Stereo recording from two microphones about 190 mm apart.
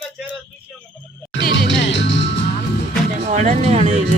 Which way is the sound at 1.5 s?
75° left (ahead or behind).